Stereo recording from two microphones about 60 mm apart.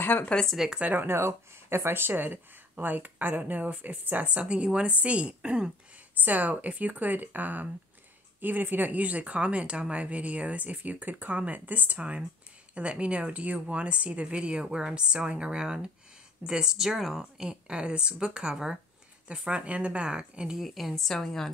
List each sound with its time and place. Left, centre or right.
0.0 s speech: left
0.7 s speech: centre
0.9 s a woman's voice: right; by 5.7 s centre
6.2 s a woman's voice: right
20.5 s a woman's voice: centre